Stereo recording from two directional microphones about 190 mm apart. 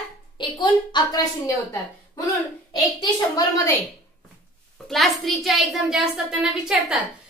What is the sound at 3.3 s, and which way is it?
Speech, 15° left (ahead or behind).